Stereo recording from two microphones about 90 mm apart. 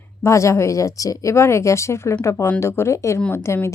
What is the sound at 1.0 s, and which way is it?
A woman's voice, 40° left (ahead or behind).